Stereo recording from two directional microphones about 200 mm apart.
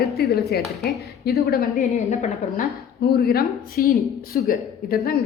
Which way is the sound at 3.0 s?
50° left (ahead or behind).